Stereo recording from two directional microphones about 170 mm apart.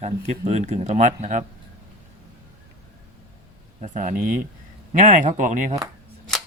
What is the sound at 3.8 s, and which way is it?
Speech, 45° right (ahead or behind).